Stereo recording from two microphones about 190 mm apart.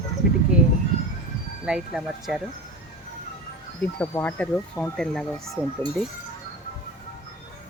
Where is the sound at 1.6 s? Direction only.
5° right (ahead or behind).